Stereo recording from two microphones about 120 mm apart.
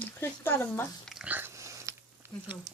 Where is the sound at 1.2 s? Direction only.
15° right (ahead or behind).